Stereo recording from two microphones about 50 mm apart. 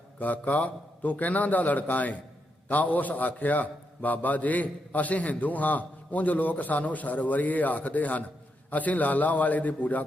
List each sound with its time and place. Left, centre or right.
0.2 s a man's voice: left